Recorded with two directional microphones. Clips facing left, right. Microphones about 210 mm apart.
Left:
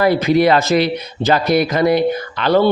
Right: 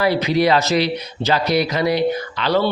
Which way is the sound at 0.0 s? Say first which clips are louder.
Left 4 dB; 50° left (ahead or behind).